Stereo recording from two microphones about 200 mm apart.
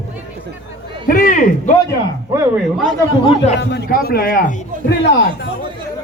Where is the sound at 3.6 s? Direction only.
55° left (ahead or behind).